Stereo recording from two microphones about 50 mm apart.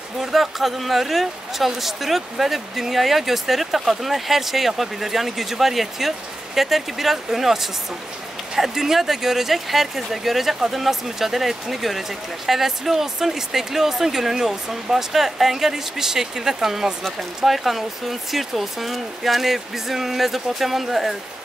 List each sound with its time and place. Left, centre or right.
0.2 s speech: centre